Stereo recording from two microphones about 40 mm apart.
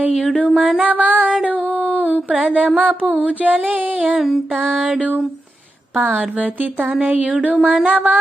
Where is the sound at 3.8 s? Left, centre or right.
Right.